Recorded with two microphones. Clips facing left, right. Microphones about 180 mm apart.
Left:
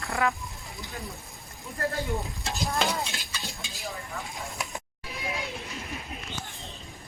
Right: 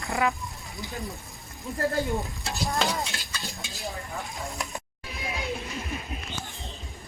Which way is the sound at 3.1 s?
15° left (ahead or behind).